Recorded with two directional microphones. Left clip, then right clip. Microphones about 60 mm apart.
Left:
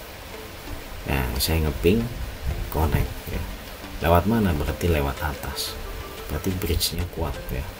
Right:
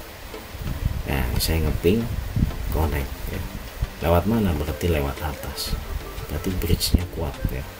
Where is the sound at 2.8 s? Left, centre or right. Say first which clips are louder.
Left 1 dB; centre.